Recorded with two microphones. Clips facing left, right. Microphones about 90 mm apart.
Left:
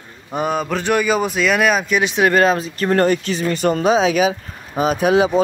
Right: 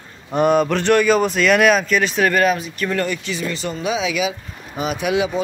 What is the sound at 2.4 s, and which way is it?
Speech, 30° left (ahead or behind).